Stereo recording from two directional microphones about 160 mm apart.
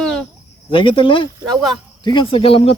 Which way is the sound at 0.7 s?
35° left (ahead or behind).